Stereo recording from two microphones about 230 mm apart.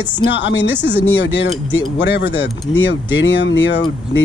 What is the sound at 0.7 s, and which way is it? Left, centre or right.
Speech, centre.